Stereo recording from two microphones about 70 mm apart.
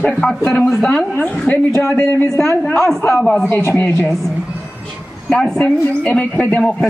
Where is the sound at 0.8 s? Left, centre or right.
Centre.